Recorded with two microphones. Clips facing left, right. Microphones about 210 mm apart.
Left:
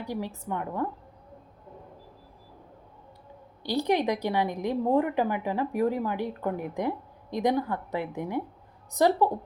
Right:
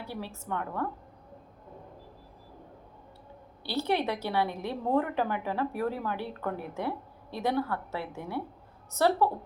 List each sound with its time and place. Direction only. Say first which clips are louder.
0.0 s a woman's voice: left 5 dB; 15° left (ahead or behind)
3.6 s a woman's voice: left 4 dB; 15° left (ahead or behind)